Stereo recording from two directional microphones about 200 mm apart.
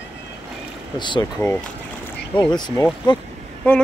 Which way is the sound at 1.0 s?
25° left (ahead or behind).